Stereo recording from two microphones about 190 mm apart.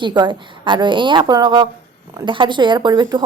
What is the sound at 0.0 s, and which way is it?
A woman's voice, 25° right (ahead or behind).